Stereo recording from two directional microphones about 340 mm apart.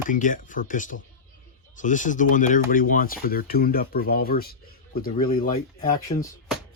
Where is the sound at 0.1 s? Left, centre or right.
Left.